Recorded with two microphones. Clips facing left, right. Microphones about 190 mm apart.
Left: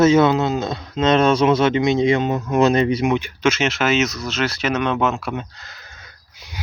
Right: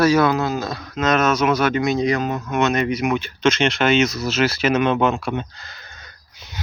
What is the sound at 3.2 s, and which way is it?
Speech, 10° left (ahead or behind).